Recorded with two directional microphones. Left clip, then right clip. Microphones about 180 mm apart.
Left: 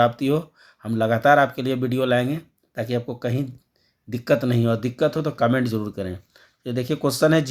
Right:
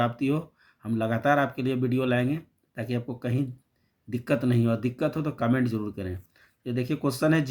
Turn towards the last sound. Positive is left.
turn(degrees=45)  # may be behind; listen again after turning